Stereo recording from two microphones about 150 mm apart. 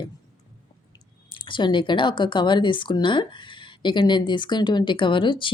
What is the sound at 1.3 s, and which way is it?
Speech, 30° left (ahead or behind).